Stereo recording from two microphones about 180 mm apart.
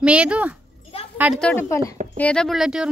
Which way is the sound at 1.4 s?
10° left (ahead or behind).